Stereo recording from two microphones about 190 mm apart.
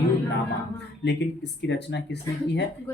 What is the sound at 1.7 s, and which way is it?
Speech, 65° left (ahead or behind).